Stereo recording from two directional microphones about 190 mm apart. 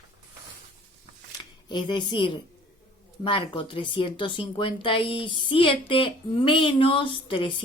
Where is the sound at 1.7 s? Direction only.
25° left (ahead or behind).